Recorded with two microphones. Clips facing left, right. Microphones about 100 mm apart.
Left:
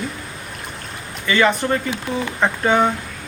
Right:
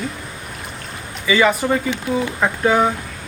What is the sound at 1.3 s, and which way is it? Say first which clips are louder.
Speech: right 1 dB; 5° right (ahead or behind).